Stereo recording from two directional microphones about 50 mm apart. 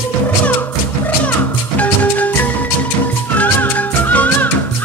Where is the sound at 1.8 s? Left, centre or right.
Left.